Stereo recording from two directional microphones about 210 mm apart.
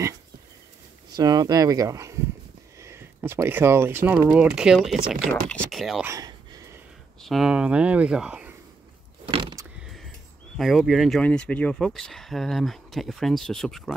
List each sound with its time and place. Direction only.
1.1 s speech: 20° right (ahead or behind); by 6.0 s centre (ahead or behind)
6.0 s a sound: 15° right (ahead or behind)
7.2 s speech: centre (ahead or behind)
9.2 s vehicle: 25° right (ahead or behind)
10.6 s speech: centre (ahead or behind)